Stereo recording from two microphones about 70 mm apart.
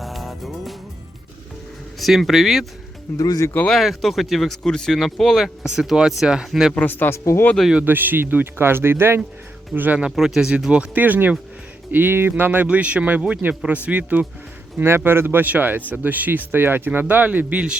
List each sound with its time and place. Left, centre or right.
0.0 s music: centre
2.0 s speech: centre
3.2 s speech: left
3.7 s speech: centre
5.6 s speech: centre
6.7 s speech: left
7.9 s a man's voice: right
10.2 s a man's voice: centre; by 12.5 s right
12.5 s a man's voice: right